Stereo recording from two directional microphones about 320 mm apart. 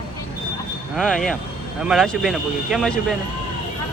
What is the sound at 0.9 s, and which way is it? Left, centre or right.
Speech, centre.